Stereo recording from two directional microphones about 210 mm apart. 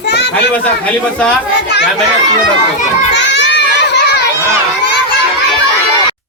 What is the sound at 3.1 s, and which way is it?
Children playing, 60° left (ahead or behind).